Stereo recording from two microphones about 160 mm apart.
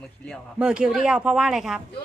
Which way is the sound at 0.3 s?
5° right (ahead or behind).